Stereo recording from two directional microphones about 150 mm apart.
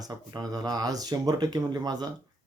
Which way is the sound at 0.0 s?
25° right (ahead or behind).